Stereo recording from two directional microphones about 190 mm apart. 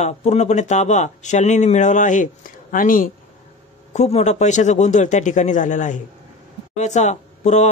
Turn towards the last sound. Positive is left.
turn(degrees=40)  # may be behind; listen again after turning